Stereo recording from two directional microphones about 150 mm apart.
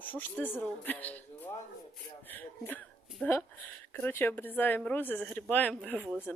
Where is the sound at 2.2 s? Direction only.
10° left (ahead or behind).